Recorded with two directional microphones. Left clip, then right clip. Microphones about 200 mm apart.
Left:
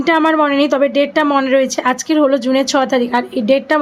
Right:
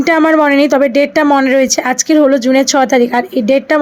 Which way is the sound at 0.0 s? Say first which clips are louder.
Right 3 dB; 20° right (ahead or behind).